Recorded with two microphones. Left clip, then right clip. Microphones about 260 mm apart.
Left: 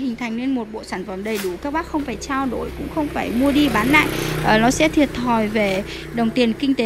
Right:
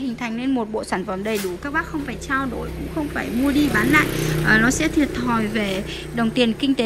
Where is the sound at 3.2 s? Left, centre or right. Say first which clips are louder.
Left 2 dB; centre.